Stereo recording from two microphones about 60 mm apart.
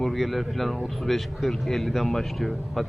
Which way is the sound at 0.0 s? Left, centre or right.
Centre.